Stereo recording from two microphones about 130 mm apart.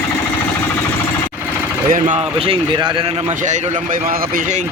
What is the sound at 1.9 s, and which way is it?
Speech, 75° right (ahead or behind).